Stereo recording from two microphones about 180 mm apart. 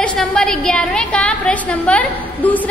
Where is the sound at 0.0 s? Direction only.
5° left (ahead or behind).